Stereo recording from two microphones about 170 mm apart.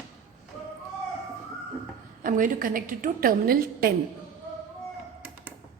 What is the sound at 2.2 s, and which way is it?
A woman's voice, 50° right (ahead or behind).